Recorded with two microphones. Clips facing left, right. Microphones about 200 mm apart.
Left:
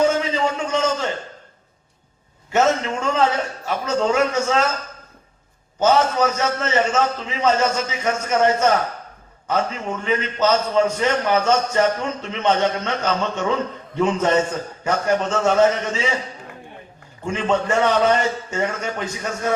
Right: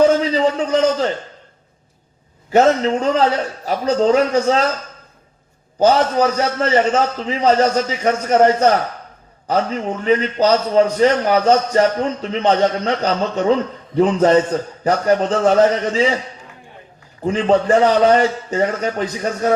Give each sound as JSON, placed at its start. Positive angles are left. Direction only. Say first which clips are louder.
{"t": 0.0, "sound": "a sound", "louder": "right 5 dB", "side_deg": -35}
{"t": 2.5, "sound": "a man's voice", "louder": "right 5 dB", "side_deg": -35}
{"t": 5.8, "sound": "a man's voice", "louder": "right 3 dB", "side_deg": -35}
{"t": 17.2, "sound": "a man's voice", "louder": "right 6 dB", "side_deg": -35}